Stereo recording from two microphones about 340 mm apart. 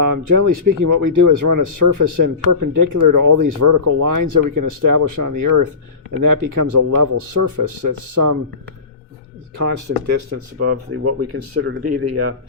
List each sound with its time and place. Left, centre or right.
0.0 s speech: right
9.6 s speech: right